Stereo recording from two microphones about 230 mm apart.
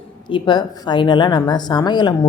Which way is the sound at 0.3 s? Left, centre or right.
Centre.